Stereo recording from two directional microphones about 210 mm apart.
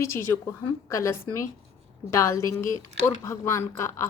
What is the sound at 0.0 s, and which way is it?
A woman's voice, 15° left (ahead or behind).